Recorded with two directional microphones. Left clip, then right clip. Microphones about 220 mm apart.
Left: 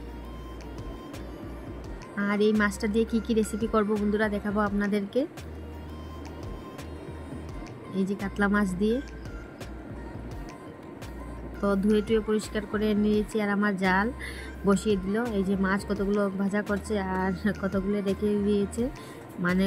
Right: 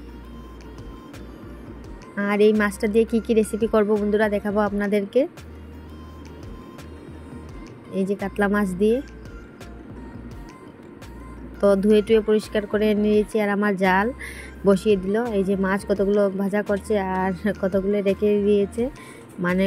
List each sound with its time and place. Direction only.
2.1 s speech: 20° right (ahead or behind)
7.9 s speech: 15° right (ahead or behind)
11.6 s speech: 20° right (ahead or behind)